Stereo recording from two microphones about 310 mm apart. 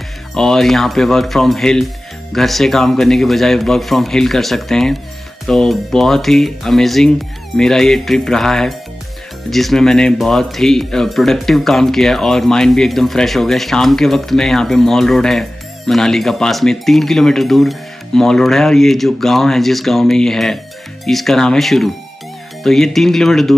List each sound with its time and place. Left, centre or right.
0.3 s speech: centre